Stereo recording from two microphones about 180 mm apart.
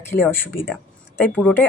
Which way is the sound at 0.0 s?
10° left (ahead or behind).